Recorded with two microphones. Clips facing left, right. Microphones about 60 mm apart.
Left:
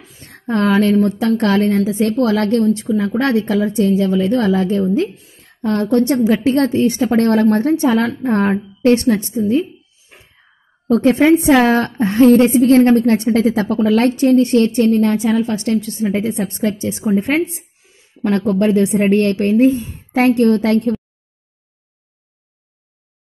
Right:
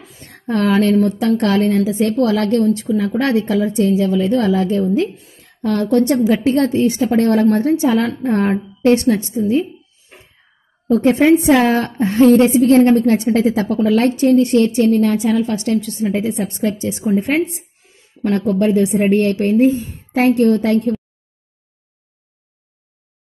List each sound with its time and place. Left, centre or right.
0.3 s a woman's voice: left
5.1 s a woman's voice: centre
5.4 s a sound: left
6.0 s a woman's voice: left
11.1 s a woman's voice: left
12.3 s a woman's voice: left
19.0 s a woman's voice: left